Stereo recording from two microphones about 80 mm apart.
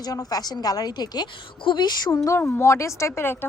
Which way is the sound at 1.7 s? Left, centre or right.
Left.